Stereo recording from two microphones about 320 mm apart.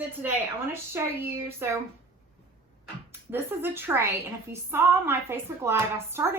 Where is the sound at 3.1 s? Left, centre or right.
Centre.